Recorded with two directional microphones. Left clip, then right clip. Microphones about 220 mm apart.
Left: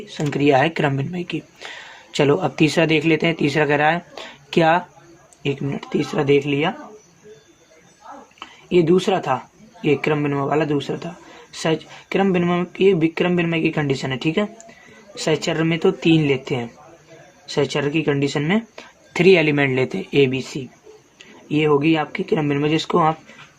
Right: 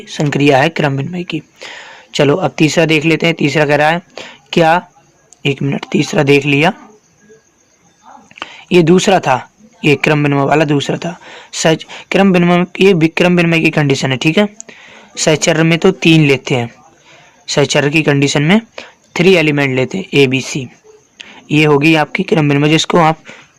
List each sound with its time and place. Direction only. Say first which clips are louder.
0.3 s speech: right 6 dB; 35° right (ahead or behind)
8.4 s speech: right 7 dB; 40° right (ahead or behind)
19.1 s speech: right 4 dB; 25° right (ahead or behind)